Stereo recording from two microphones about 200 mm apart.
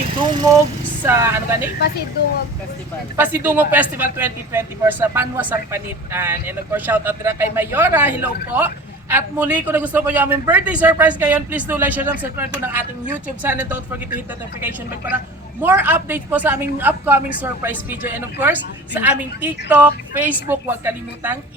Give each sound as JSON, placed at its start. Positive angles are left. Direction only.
{"t": 0.2, "sound": "speech", "side_deg": -20}
{"t": 3.2, "sound": "speech", "side_deg": -10}
{"t": 15.6, "sound": "speech", "side_deg": -10}